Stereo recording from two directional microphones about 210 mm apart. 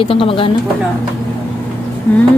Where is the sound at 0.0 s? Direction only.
25° left (ahead or behind).